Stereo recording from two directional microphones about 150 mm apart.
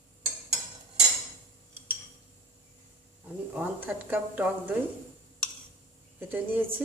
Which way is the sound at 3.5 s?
10° right (ahead or behind).